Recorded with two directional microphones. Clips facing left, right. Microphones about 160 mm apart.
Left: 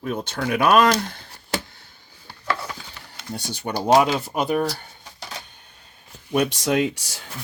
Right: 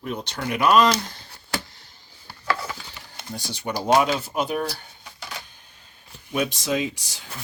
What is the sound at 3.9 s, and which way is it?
Speech, 40° left (ahead or behind).